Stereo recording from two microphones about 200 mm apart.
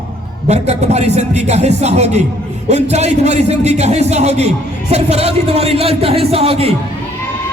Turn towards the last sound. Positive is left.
turn(degrees=-30)  # may be behind; listen again after turning